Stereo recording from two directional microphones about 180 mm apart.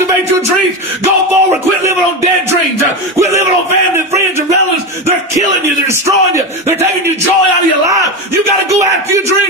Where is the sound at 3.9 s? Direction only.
15° right (ahead or behind).